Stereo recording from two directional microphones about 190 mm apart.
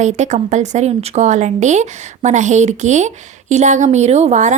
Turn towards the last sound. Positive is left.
turn(degrees=-35)  # may be behind; listen again after turning